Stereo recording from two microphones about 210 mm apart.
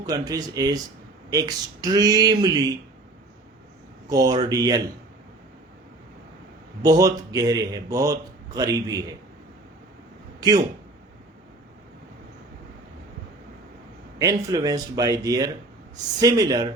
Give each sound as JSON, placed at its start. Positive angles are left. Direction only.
{"t": 0.0, "sound": "a man's voice", "side_deg": -20}
{"t": 4.1, "sound": "a man's voice", "side_deg": -15}
{"t": 6.8, "sound": "a man's voice", "side_deg": -20}
{"t": 14.2, "sound": "a man's voice", "side_deg": -15}